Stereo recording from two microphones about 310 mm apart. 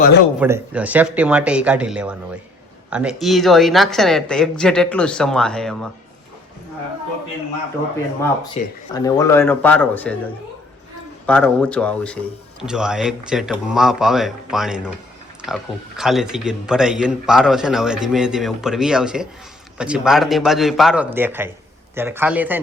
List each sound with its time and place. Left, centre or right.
0.3 s a man's voice: centre
8.6 s speech: left
8.9 s speech: centre
11.3 s a man's voice: centre